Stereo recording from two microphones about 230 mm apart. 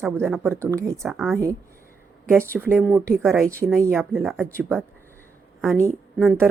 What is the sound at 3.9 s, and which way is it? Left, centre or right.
Speech, centre.